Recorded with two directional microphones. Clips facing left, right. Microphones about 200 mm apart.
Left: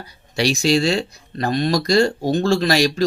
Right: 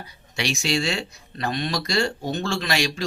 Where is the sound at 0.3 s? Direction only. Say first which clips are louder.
Left 8 dB; 35° left (ahead or behind).